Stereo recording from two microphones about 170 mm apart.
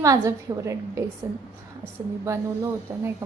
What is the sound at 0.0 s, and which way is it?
A woman's voice, 20° right (ahead or behind).